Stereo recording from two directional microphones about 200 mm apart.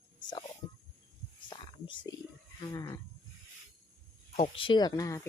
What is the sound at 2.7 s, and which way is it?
Speech, 15° left (ahead or behind).